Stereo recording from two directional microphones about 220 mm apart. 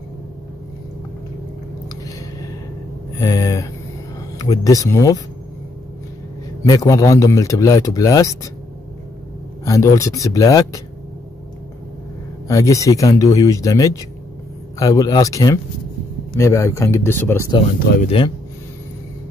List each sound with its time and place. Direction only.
3.2 s a sound: 15° left (ahead or behind)
4.4 s a man's voice: 15° left (ahead or behind)
6.6 s a man's voice: 15° left (ahead or behind)
9.7 s a man's voice: 15° left (ahead or behind)
12.4 s a man's voice: 15° left (ahead or behind)
18.0 s speech: 25° left (ahead or behind)